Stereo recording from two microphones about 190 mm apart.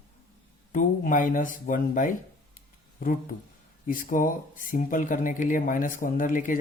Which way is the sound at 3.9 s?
45° left (ahead or behind).